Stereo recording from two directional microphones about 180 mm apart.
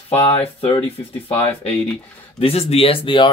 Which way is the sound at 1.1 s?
10° left (ahead or behind).